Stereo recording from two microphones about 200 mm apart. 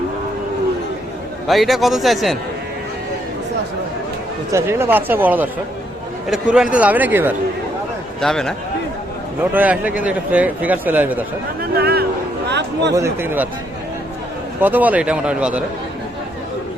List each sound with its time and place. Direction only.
1.5 s a man's voice: centre (ahead or behind)
4.5 s speech: 10° right (ahead or behind)
8.2 s a man's voice: centre (ahead or behind)
9.4 s speech: 10° right (ahead or behind)
11.8 s a sound: 50° right (ahead or behind)
12.9 s speech: 15° right (ahead or behind)
14.6 s a man's voice: 10° right (ahead or behind)